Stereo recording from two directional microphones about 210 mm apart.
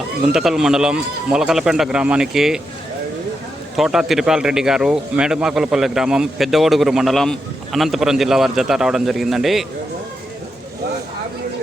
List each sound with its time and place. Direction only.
0.3 s a man's voice: centre (ahead or behind)
3.8 s a man's voice: centre (ahead or behind)